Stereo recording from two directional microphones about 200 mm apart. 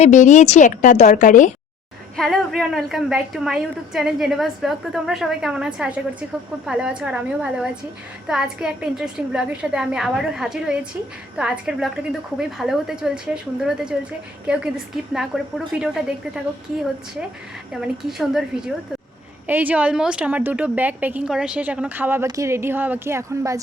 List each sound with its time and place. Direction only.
0.0 s a woman's voice: 35° left (ahead or behind)
2.1 s a woman's voice: centre (ahead or behind)
17.7 s a woman's voice: 5° right (ahead or behind)